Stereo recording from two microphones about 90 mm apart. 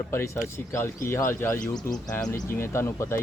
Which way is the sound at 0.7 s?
30° left (ahead or behind).